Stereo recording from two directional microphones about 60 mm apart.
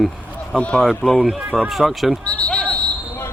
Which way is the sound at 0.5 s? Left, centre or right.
Centre.